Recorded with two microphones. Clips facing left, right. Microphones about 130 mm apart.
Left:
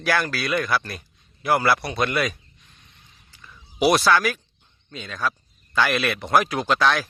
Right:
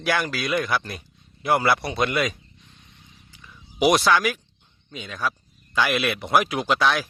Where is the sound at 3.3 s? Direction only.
15° right (ahead or behind).